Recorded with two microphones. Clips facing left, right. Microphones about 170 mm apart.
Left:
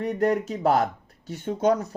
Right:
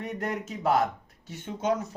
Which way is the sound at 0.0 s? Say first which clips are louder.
Left 9 dB; 35° left (ahead or behind).